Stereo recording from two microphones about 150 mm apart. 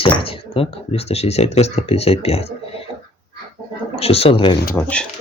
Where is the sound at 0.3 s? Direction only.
40° left (ahead or behind).